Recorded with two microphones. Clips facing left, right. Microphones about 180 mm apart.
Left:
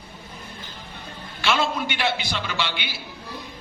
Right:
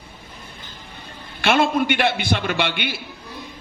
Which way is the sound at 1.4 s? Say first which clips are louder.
Right 6 dB; 55° right (ahead or behind).